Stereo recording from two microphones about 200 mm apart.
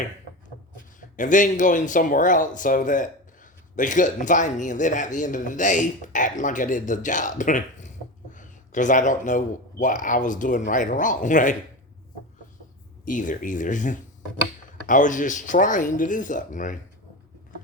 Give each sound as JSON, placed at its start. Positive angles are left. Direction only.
{"t": 1.1, "sound": "speech", "side_deg": 40}
{"t": 13.1, "sound": "speech", "side_deg": 40}